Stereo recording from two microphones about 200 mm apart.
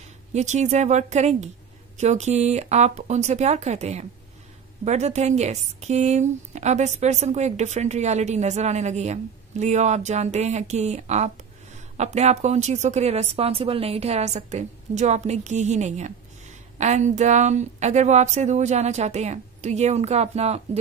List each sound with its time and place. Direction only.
0.3 s a woman's voice: 35° right (ahead or behind)